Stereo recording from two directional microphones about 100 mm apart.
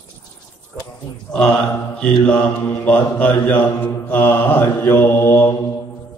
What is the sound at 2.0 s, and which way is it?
Mantra, 15° left (ahead or behind).